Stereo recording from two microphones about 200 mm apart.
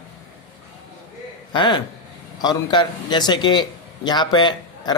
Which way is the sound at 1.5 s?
25° left (ahead or behind).